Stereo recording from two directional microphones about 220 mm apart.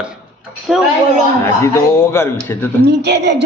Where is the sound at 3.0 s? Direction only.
50° right (ahead or behind).